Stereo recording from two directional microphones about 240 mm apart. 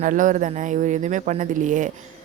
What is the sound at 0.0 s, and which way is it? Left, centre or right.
Speech, right.